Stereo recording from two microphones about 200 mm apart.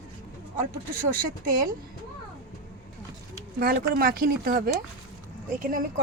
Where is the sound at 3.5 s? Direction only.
50° right (ahead or behind).